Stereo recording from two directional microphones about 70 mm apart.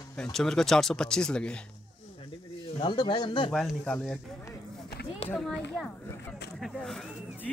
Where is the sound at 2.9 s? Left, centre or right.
Left.